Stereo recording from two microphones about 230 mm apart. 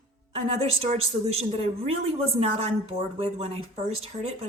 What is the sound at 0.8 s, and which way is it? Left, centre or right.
Speech, right.